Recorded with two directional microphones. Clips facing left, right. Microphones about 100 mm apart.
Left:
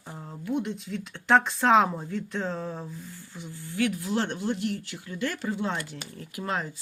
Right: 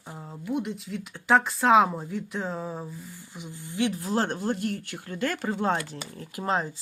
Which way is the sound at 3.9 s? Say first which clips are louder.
Right 1 dB; 40° right (ahead or behind).